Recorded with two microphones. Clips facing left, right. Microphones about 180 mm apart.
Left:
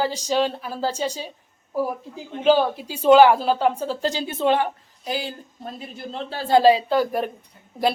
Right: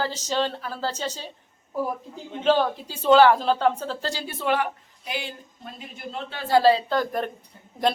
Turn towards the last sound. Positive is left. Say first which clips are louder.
# left 2 dB
turn(degrees=5)  # may be behind; listen again after turning